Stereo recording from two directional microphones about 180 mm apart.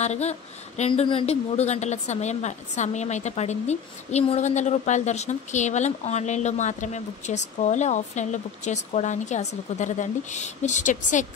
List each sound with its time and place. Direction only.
0.0 s a woman's voice: 40° left (ahead or behind)